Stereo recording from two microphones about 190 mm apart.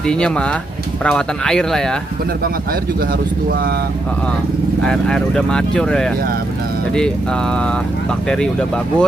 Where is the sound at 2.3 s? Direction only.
50° right (ahead or behind).